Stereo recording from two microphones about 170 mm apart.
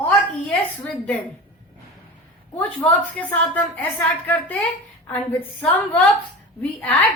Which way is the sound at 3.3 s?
10° left (ahead or behind).